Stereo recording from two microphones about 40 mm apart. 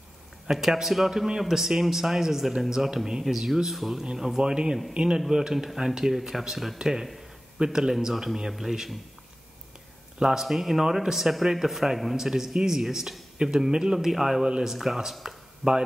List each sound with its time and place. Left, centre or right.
0.5 s a man's voice: centre
4.0 s a man's voice: centre
10.3 s a man's voice: centre
15.6 s a man's voice: right